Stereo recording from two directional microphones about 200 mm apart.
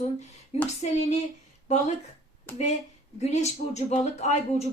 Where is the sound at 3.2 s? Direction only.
35° left (ahead or behind).